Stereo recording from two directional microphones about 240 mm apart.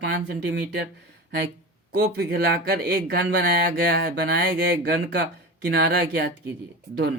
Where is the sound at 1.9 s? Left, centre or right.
Right.